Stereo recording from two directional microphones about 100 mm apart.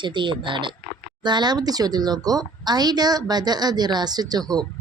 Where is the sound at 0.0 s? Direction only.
50° right (ahead or behind).